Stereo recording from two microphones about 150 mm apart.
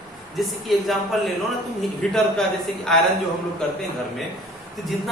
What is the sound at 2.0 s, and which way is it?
Speech, 5° left (ahead or behind).